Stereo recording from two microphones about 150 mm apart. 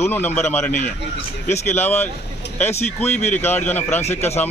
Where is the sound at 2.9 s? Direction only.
10° left (ahead or behind).